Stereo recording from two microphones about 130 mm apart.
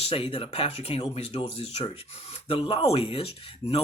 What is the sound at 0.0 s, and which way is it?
Speech, 45° left (ahead or behind).